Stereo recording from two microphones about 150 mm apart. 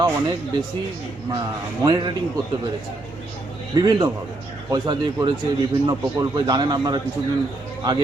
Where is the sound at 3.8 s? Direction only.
30° right (ahead or behind).